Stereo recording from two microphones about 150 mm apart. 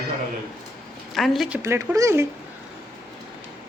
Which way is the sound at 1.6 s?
15° right (ahead or behind).